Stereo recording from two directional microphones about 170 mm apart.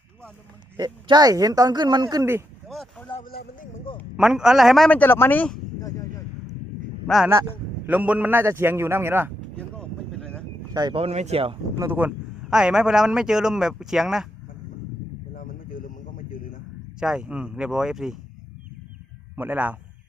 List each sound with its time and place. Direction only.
0.8 s speech: 25° right (ahead or behind)
2.6 s basketball bounce: centre (ahead or behind)
3.2 s a sound: 60° left (ahead or behind)
3.9 s a sound: 30° left (ahead or behind)
4.2 s a man's voice: 5° right (ahead or behind)
7.9 s a man's voice: 10° right (ahead or behind)
9.6 s vehicle: 5° left (ahead or behind)
10.8 s speech: 30° right (ahead or behind)
11.8 s a man's voice: 10° right (ahead or behind)
15.4 s a sound: 55° left (ahead or behind)
17.0 s a man's voice: 5° right (ahead or behind)
19.4 s a man's voice: 10° right (ahead or behind)